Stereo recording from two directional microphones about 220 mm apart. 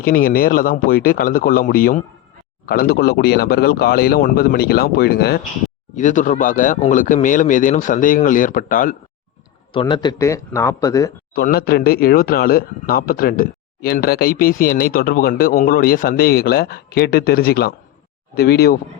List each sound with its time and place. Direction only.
0.0 s speech: 40° left (ahead or behind)
5.9 s speech: 35° left (ahead or behind)
9.7 s speech: 20° left (ahead or behind)
11.3 s speech: 45° left (ahead or behind)